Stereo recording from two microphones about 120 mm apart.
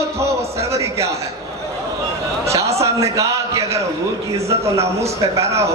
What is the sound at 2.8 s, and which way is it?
A man's voice, 25° right (ahead or behind).